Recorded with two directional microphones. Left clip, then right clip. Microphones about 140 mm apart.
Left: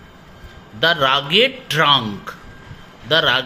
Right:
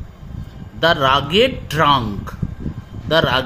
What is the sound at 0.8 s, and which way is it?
A man's voice, 40° right (ahead or behind).